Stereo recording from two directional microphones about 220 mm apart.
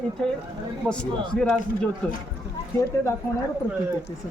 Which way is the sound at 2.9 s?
10° left (ahead or behind).